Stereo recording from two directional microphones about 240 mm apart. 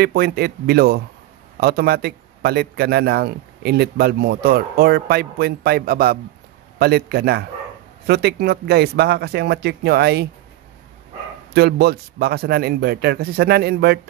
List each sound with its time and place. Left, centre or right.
0.0 s a man's voice: right
11.5 s a man's voice: right